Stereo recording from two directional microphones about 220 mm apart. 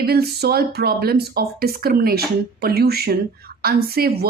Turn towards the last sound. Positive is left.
turn(degrees=-45)  # may be behind; listen again after turning